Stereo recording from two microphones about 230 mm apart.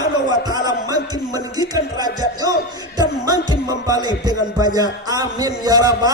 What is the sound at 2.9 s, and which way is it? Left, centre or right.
Speech, centre.